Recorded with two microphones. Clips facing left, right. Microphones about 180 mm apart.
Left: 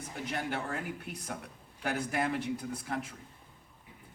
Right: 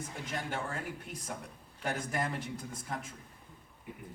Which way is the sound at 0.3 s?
65° left (ahead or behind).